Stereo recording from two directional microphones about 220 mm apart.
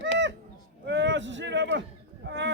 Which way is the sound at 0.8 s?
55° right (ahead or behind).